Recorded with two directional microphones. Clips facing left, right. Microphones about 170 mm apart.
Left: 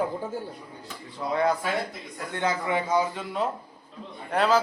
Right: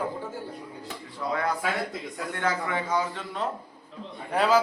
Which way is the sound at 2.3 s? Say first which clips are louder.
Left 3 dB; 20° left (ahead or behind).